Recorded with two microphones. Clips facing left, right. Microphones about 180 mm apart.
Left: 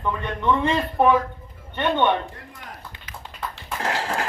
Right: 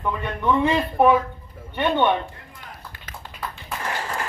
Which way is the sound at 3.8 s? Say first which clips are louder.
Left 4 dB; 90° left.